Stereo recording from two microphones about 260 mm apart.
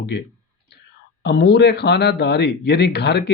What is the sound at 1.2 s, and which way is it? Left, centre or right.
Speech, left.